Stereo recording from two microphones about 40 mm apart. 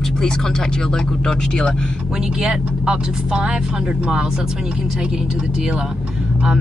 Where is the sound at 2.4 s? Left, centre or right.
Right.